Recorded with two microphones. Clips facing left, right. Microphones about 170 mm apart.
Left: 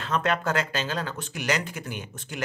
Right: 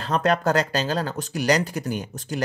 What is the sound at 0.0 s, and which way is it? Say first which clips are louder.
Speech: right 5 dB; 40° right (ahead or behind).